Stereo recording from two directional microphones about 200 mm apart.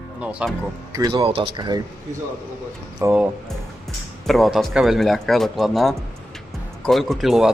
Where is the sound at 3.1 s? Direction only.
Centre (ahead or behind).